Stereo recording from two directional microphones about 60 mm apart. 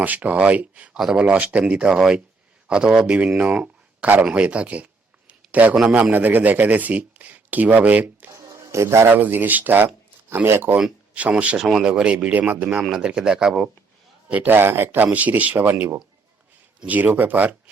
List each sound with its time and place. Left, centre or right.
0.0 s speech: right
5.3 s a sound: right
5.9 s speech: right
8.3 s a sound: right
9.1 s speech: right
10.8 s speech: right
11.5 s speech: centre
14.3 s speech: right
14.5 s speech: right
16.8 s speech: right